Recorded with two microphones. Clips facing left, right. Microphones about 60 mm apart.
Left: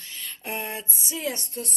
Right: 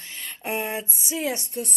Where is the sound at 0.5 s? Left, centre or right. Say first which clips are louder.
Right 5 dB; centre.